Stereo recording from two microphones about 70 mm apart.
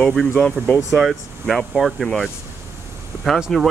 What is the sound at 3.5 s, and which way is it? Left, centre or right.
Speech, centre.